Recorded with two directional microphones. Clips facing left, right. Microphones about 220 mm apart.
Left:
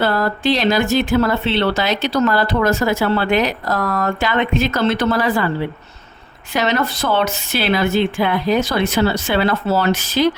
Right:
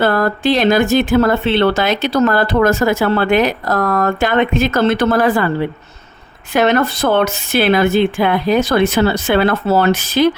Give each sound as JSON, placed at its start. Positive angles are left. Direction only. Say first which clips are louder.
{"t": 0.0, "sound": "speech", "louder": "right 3 dB", "side_deg": -50}
{"t": 6.5, "sound": "speech", "louder": "right 5 dB", "side_deg": -55}